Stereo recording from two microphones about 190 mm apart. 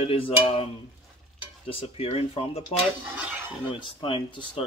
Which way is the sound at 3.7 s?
25° left (ahead or behind).